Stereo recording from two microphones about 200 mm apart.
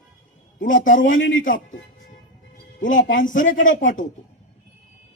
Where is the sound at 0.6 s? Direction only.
40° left (ahead or behind).